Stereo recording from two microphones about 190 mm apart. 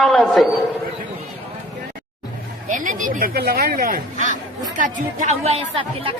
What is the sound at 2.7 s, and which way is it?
Speech, 45° right (ahead or behind).